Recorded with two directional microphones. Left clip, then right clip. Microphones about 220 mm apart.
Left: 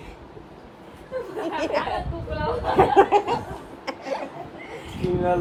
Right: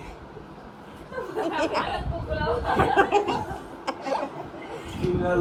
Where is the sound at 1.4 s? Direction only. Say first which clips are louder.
Even; 10° left (ahead or behind).